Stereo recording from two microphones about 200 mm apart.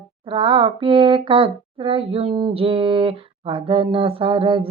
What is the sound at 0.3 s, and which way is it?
Speech, 25° right (ahead or behind).